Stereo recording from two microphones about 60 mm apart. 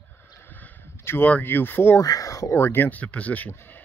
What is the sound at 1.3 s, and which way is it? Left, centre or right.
Speech, left.